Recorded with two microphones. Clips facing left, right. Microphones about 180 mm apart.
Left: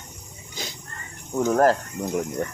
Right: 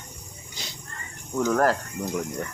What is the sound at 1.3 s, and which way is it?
Toilet flush, 25° left (ahead or behind).